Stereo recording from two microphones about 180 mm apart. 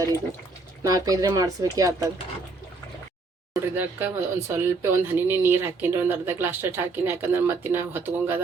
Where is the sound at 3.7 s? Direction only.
10° right (ahead or behind).